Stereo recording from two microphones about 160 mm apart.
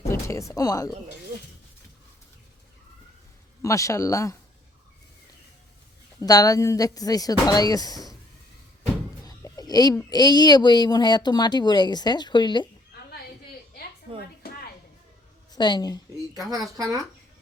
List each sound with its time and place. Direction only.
0.1 s speech: 20° left (ahead or behind)
3.6 s speech: 20° left (ahead or behind)
6.1 s speech: 20° left (ahead or behind)
9.2 s a sound: 25° left (ahead or behind)
10.1 s speech: 25° left (ahead or behind)
15.5 s speech: 25° left (ahead or behind)
16.5 s speech: 25° right (ahead or behind)